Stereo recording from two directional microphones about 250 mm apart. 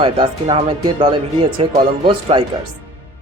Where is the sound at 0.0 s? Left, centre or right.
Centre.